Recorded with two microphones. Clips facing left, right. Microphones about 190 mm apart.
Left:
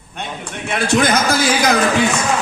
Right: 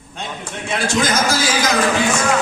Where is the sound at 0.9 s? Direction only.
60° left (ahead or behind).